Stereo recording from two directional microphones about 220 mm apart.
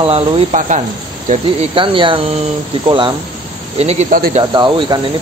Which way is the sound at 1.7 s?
25° right (ahead or behind).